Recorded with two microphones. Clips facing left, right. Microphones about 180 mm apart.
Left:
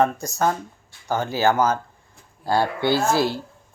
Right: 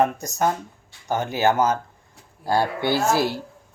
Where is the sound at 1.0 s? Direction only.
20° right (ahead or behind).